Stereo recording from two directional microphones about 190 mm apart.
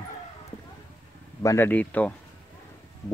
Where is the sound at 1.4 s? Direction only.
15° left (ahead or behind).